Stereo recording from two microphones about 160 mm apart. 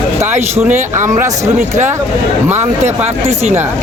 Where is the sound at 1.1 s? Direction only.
20° right (ahead or behind).